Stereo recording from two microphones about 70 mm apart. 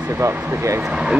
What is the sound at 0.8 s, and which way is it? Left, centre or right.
Speech, centre.